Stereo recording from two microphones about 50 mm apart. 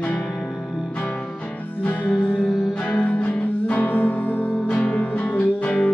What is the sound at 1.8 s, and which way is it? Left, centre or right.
Music, left.